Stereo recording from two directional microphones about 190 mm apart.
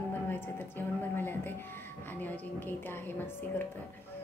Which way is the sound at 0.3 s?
10° left (ahead or behind).